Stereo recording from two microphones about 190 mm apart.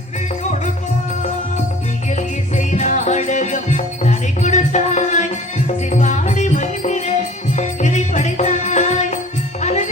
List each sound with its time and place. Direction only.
2.6 s music: 40° left (ahead or behind)